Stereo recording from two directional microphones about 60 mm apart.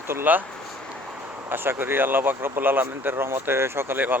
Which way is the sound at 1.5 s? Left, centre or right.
Right.